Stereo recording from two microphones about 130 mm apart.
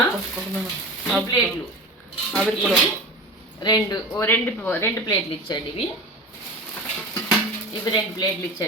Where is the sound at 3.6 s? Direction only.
30° left (ahead or behind).